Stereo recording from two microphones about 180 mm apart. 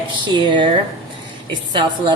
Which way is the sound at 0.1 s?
25° right (ahead or behind).